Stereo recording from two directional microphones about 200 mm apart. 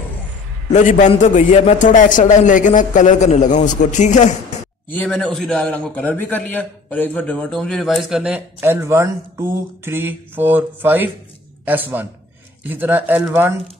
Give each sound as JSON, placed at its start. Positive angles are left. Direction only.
{"t": 0.7, "sound": "a man's voice", "side_deg": 35}
{"t": 4.9, "sound": "a man's voice", "side_deg": 5}